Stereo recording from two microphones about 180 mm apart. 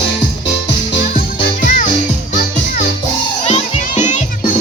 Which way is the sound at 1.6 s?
50° left (ahead or behind).